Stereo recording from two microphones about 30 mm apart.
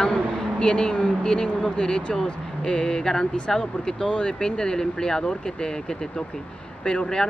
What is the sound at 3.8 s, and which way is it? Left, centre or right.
Speech, left.